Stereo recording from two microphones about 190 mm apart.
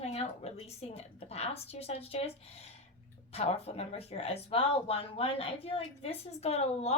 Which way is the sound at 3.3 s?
30° left (ahead or behind).